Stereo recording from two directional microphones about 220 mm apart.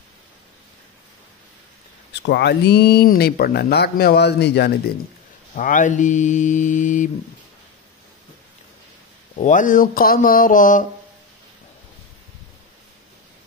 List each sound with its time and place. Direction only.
2.2 s speech: 50° left (ahead or behind)
5.5 s mantra: 35° left (ahead or behind)
9.3 s mantra: 35° left (ahead or behind)